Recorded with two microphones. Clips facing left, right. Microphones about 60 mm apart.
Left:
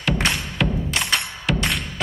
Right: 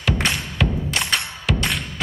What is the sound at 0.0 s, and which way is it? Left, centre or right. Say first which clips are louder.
Music: even; centre.